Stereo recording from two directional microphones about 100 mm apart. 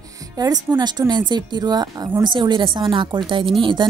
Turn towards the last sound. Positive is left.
turn(degrees=-55)  # may be behind; listen again after turning